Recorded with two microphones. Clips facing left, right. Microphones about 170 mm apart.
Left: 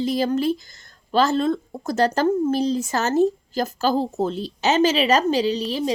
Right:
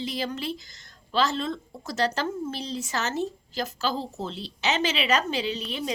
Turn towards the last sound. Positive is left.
turn(degrees=35)  # may be behind; listen again after turning